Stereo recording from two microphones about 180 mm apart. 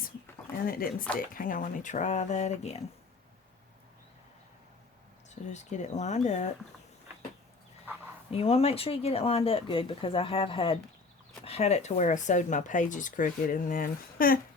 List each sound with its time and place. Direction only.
0.6 s speech: 55° left (ahead or behind); by 2.8 s 40° left (ahead or behind)
5.3 s speech: 40° left (ahead or behind)
8.3 s speech: 35° left (ahead or behind); by 14.3 s 50° left (ahead or behind)